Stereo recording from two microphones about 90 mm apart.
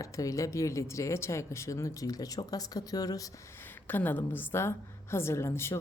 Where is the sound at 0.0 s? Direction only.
40° left (ahead or behind).